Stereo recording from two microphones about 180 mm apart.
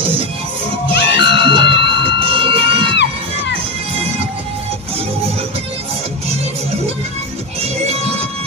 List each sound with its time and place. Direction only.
0.9 s music: 70° left (ahead or behind)
1.3 s music: 30° right (ahead or behind)
1.6 s a sound: 70° left (ahead or behind)
2.0 s crowd: 30° right (ahead or behind)
7.6 s music: 35° right (ahead or behind)